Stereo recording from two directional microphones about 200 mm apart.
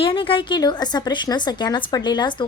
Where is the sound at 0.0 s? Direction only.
25° left (ahead or behind).